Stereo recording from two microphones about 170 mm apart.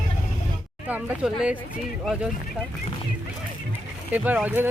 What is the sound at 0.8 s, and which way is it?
Speech, 5° right (ahead or behind).